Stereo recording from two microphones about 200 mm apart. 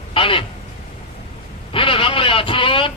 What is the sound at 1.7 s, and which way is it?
Speech, 25° left (ahead or behind).